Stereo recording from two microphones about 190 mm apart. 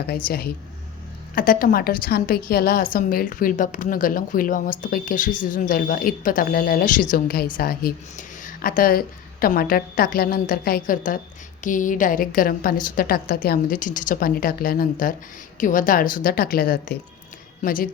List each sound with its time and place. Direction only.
0.3 s a woman's voice: 55° left (ahead or behind)